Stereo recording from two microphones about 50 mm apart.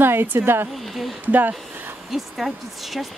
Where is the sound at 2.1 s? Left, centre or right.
Centre.